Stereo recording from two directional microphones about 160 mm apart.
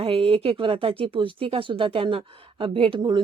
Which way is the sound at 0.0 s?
35° right (ahead or behind).